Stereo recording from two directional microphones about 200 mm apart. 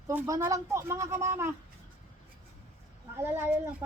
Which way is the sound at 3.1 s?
10° right (ahead or behind).